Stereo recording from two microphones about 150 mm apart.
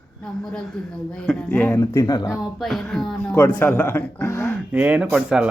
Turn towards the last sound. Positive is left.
turn(degrees=-5)  # may be behind; listen again after turning